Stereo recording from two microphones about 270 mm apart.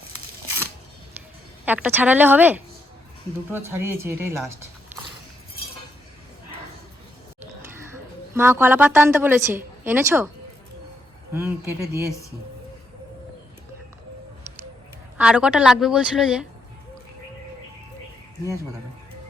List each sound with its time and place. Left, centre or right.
1.6 s a woman's voice: centre
8.4 s a woman's voice: centre
11.3 s a woman's voice: centre
15.2 s a woman's voice: centre